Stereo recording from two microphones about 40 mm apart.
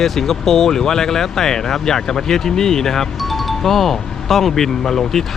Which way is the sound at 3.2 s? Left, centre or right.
Centre.